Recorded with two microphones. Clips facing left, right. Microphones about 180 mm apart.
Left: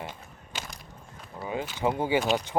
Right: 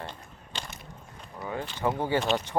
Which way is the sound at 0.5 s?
5° left (ahead or behind).